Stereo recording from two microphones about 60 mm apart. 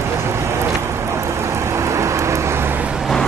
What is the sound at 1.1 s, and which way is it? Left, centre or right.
Vehicle, right.